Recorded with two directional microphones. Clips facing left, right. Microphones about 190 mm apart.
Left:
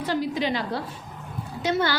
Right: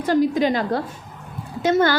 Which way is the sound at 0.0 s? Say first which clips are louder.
Right 7 dB; 45° right (ahead or behind).